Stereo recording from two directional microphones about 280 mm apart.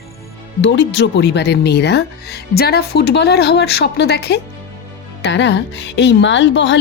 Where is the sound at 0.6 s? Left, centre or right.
Left.